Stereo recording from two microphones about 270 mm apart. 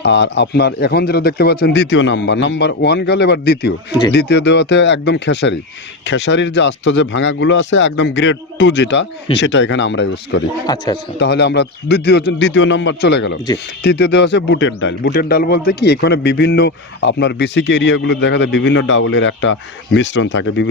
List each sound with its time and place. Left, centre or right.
0.0 s a man's voice: left
10.7 s speech: centre
11.2 s a man's voice: left